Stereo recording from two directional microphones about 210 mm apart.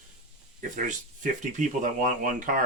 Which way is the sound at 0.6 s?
40° right (ahead or behind).